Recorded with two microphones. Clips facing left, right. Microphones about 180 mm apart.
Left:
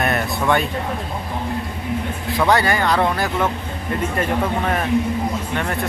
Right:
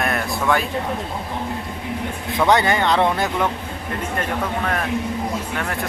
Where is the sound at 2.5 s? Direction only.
20° right (ahead or behind).